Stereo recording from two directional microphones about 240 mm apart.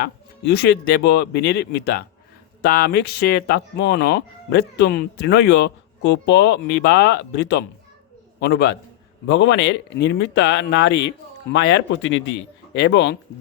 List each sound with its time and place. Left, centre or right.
0.0 s speech: left